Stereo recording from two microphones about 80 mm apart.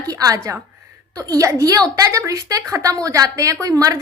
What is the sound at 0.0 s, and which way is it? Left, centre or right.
A woman's voice, right.